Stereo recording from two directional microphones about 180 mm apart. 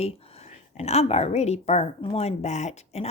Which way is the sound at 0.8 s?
35° left (ahead or behind).